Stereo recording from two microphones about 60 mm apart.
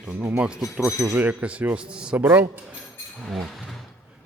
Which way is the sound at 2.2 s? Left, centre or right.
Right.